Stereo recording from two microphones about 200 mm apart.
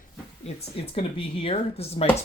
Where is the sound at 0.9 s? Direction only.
25° left (ahead or behind).